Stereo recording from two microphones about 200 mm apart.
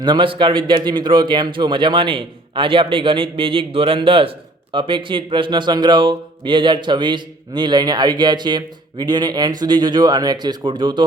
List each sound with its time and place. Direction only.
0.0 s a man's voice: 25° right (ahead or behind)